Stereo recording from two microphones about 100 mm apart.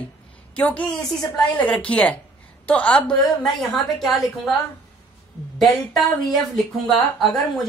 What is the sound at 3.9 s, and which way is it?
Speech, 5° left (ahead or behind).